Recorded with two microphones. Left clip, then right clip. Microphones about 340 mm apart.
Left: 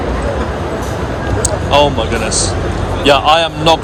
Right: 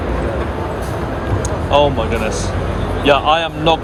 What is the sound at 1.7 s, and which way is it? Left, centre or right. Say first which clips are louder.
A man's voice: left 2 dB; centre.